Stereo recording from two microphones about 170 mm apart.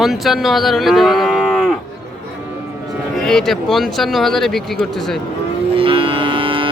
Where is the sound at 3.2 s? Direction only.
Centre (ahead or behind).